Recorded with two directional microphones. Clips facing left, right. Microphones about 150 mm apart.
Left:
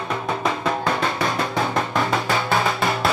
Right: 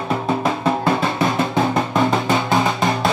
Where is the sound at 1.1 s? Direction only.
25° right (ahead or behind).